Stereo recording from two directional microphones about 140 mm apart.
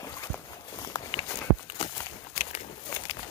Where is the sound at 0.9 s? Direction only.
30° left (ahead or behind).